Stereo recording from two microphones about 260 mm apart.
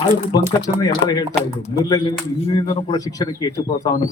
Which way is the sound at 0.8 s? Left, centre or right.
Centre.